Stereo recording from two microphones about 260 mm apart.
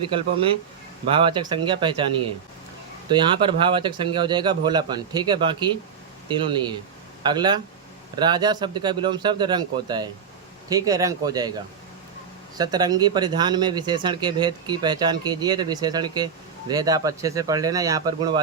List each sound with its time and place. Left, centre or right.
0.1 s speech: centre
3.1 s speech: centre